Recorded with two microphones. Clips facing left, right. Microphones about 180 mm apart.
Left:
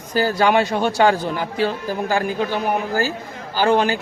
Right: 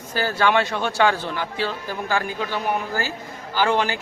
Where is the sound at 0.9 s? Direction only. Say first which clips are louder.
Left 2 dB; 40° left (ahead or behind).